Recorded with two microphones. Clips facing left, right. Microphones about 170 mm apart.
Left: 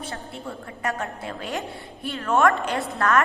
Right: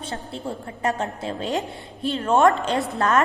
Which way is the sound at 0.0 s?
30° right (ahead or behind).